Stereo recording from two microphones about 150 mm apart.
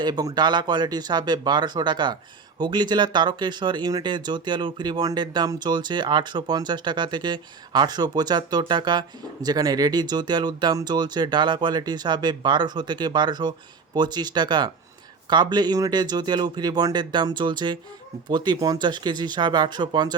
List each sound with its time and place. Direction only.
0.0 s speech: 25° right (ahead or behind)